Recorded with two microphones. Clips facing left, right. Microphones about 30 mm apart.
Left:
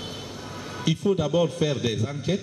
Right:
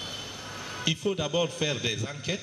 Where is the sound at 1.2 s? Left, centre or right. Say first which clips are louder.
Left 4 dB; right.